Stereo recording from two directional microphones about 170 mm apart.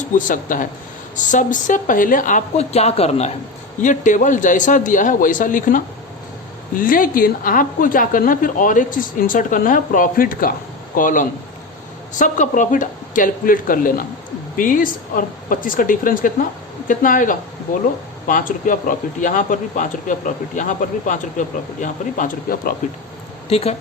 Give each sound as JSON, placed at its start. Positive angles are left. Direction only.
{"t": 0.0, "sound": "speech", "side_deg": 50}
{"t": 23.5, "sound": "speech", "side_deg": 35}